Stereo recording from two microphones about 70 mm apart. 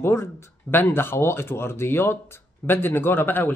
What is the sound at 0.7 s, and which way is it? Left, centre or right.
Speech, left.